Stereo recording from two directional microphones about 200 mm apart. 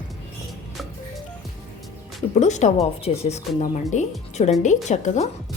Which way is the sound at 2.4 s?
35° left (ahead or behind).